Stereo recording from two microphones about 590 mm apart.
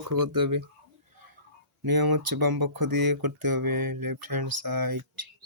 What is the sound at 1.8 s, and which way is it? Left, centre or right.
Speech, right.